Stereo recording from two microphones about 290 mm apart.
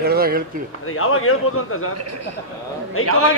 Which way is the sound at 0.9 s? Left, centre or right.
Left.